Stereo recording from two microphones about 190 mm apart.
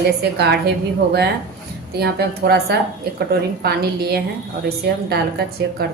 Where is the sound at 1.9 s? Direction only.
55° right (ahead or behind).